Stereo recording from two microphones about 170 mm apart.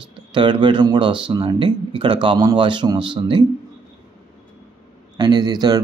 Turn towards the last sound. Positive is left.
turn(degrees=-25)  # may be behind; listen again after turning